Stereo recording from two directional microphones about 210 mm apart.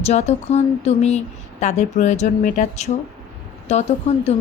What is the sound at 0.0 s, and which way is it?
Speech, 30° left (ahead or behind).